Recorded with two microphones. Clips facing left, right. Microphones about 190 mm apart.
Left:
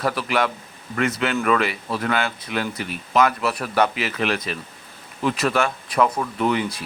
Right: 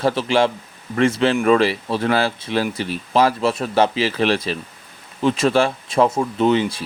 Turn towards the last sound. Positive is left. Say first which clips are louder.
# right 5 dB
turn(degrees=-25)  # may be behind; listen again after turning